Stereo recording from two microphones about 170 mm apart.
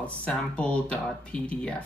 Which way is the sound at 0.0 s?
5° left (ahead or behind).